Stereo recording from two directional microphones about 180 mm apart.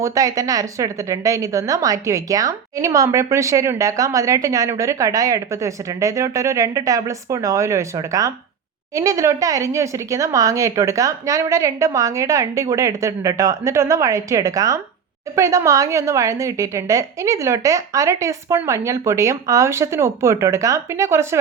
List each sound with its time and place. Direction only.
0.0 s a woman's voice: 20° right (ahead or behind)